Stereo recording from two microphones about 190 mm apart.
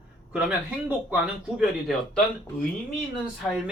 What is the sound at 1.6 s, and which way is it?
Speech, centre (ahead or behind).